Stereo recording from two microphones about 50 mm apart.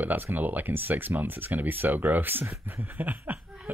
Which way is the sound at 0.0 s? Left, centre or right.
Right.